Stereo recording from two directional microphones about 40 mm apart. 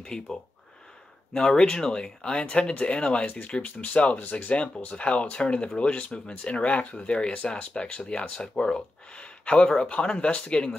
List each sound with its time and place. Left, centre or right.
0.0 s speech: centre
3.3 s speech: left
4.9 s speech: left
6.4 s speech: left
6.7 s speech: left
7.2 s speech: left